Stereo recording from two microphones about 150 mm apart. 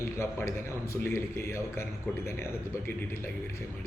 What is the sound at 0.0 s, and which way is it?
A man's voice, 15° left (ahead or behind).